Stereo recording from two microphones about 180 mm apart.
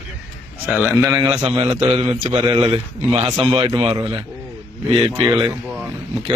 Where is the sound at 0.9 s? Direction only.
20° right (ahead or behind).